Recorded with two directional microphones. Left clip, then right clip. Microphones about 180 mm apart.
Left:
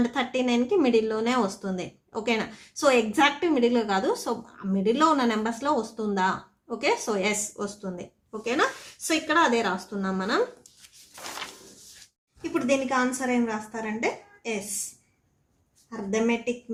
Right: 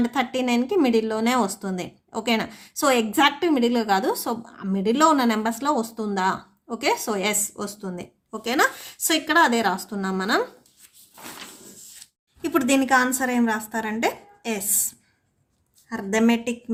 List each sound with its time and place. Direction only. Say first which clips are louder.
0.0 s speech: right 2 dB; 30° right (ahead or behind)
12.4 s a woman's voice: right 4 dB; 55° right (ahead or behind)
15.9 s a woman's voice: right 4 dB; 50° right (ahead or behind)